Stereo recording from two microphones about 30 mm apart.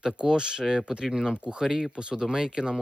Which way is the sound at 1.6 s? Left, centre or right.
Centre.